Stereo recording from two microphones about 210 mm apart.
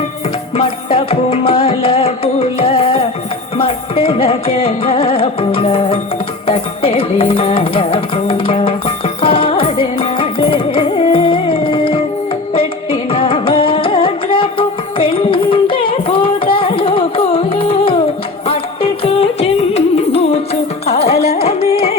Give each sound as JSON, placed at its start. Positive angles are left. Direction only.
{"t": 0.5, "sound": "music", "side_deg": 25}
{"t": 15.8, "sound": "carnatic music", "side_deg": 25}
{"t": 18.4, "sound": "music", "side_deg": 25}
{"t": 21.2, "sound": "music", "side_deg": 50}
{"t": 21.4, "sound": "music", "side_deg": 30}